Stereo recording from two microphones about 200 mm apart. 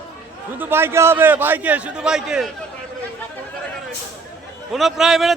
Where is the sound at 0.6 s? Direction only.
10° right (ahead or behind).